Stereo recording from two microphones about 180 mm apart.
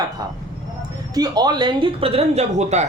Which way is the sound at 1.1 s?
20° right (ahead or behind).